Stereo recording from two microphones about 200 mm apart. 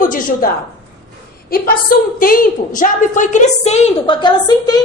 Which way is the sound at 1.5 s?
45° left (ahead or behind).